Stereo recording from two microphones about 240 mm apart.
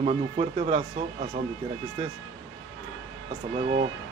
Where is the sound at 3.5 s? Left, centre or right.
Right.